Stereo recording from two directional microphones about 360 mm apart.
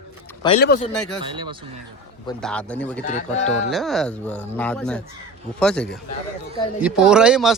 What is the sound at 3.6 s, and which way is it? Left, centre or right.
A man's voice, centre.